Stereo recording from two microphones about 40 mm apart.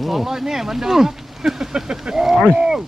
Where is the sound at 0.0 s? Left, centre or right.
Centre.